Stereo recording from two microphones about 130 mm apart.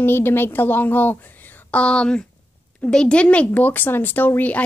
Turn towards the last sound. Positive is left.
turn(degrees=10)  # may be behind; listen again after turning